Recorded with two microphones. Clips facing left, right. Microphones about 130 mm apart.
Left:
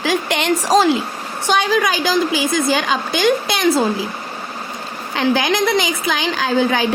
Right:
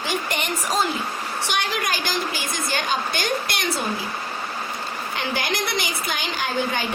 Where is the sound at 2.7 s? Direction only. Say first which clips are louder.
Left 6 dB; 90° left.